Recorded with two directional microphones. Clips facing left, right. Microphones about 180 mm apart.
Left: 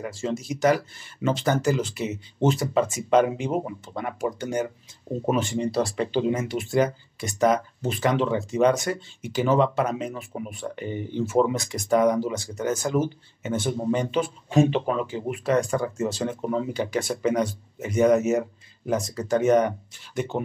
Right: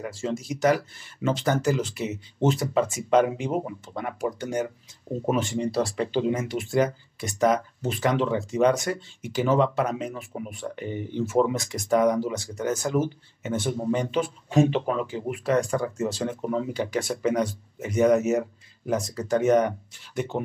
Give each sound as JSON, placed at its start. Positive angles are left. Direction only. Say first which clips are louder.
{"t": 0.0, "sound": "speech", "louder": "left 1 dB", "side_deg": 25}